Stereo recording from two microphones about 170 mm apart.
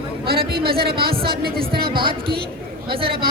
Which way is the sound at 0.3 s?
65° right (ahead or behind).